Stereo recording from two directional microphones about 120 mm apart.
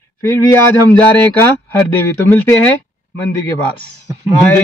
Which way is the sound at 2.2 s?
20° left (ahead or behind).